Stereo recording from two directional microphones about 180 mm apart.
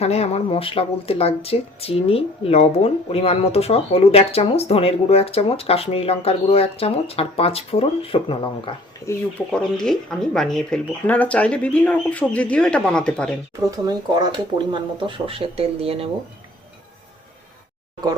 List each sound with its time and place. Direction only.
0.0 s speech: 35° left (ahead or behind)
9.0 s speech: 15° left (ahead or behind)
9.5 s speech: 5° left (ahead or behind)
13.7 s speech: 20° right (ahead or behind)